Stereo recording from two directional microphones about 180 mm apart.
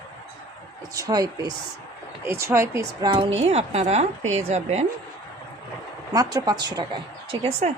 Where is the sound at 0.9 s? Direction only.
20° right (ahead or behind).